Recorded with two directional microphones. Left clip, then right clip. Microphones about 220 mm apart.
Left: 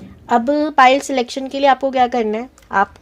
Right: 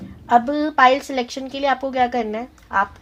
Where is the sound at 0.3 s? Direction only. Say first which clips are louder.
Left 1 dB; 50° left (ahead or behind).